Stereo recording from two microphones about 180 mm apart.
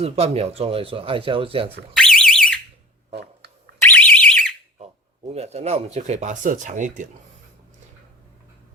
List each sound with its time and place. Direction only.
0.0 s speech: 35° right (ahead or behind)
1.9 s alarm: 5° left (ahead or behind)
3.1 s a sound: 65° right (ahead or behind)
3.8 s alarm: 10° left (ahead or behind)
5.3 s speech: 35° right (ahead or behind)